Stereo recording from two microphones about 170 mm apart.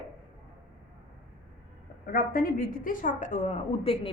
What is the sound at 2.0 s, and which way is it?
A woman's voice, 55° left (ahead or behind).